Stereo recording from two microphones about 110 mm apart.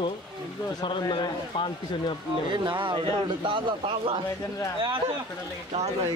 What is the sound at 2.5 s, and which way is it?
Speech, 45° right (ahead or behind).